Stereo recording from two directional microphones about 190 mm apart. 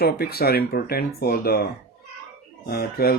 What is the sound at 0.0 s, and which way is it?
Speech, 55° left (ahead or behind).